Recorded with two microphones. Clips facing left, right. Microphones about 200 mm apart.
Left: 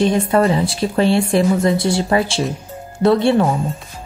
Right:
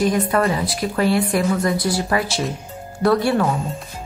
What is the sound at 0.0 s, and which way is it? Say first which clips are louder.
Speech: left 3 dB; 25° left (ahead or behind).